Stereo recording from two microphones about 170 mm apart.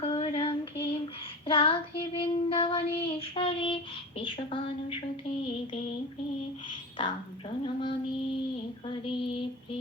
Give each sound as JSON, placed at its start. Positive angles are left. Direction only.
{"t": 0.0, "sound": "child singing", "side_deg": 35}
{"t": 4.2, "sound": "a woman's voice", "side_deg": 30}
{"t": 7.6, "sound": "a sound", "side_deg": 30}
{"t": 8.9, "sound": "female singing", "side_deg": 30}